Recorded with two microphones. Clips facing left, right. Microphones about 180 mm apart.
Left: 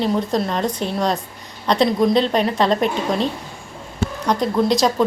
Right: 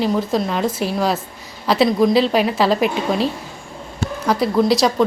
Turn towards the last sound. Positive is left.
turn(degrees=0)  # may be behind; listen again after turning